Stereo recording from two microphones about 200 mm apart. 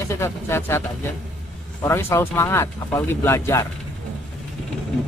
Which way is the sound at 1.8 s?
10° left (ahead or behind).